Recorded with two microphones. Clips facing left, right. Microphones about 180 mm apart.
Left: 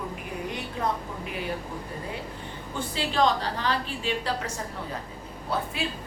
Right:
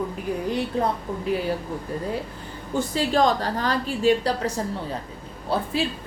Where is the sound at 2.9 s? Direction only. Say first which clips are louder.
Right 3 dB; 45° right (ahead or behind).